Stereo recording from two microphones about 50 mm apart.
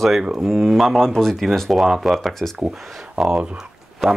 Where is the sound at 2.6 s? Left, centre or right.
Centre.